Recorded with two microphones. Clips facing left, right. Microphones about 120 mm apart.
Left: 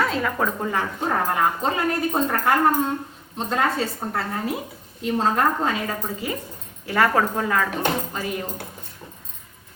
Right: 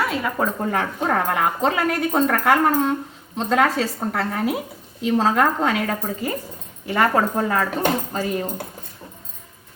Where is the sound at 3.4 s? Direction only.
90° right.